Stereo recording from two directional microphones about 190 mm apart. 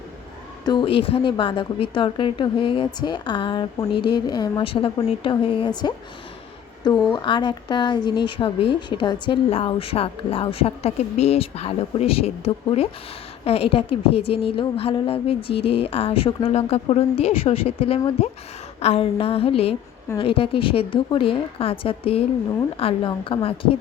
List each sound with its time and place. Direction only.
0.6 s a woman's voice: 25° left (ahead or behind)
7.1 s a woman's voice: 25° left (ahead or behind)